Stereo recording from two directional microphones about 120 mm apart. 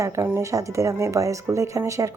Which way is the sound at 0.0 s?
25° right (ahead or behind).